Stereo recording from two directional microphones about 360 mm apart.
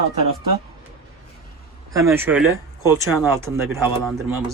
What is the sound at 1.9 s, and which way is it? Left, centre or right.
Speech, centre.